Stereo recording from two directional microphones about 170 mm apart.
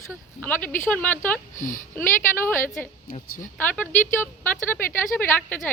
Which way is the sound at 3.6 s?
10° left (ahead or behind).